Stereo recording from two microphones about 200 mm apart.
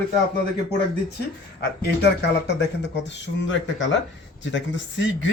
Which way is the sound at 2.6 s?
60° left (ahead or behind).